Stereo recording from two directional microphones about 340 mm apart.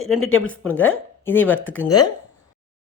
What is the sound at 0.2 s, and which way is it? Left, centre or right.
Speech, left.